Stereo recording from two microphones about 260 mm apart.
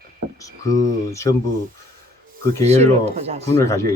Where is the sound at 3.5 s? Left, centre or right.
Centre.